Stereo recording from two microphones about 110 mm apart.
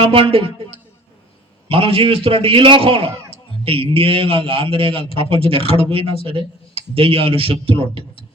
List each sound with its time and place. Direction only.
0.0 s a man's voice: 55° right (ahead or behind)
1.6 s a man's voice: 55° right (ahead or behind)